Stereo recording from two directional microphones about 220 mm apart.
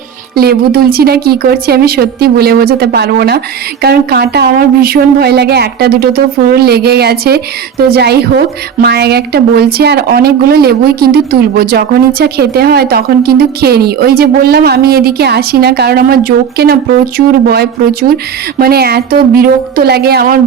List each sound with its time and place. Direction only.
0.3 s speech: 45° right (ahead or behind)